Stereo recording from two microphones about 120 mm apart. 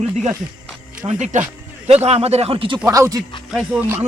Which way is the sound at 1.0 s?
80° right.